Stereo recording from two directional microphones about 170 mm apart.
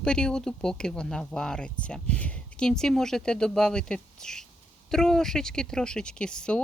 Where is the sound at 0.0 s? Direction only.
5° left (ahead or behind).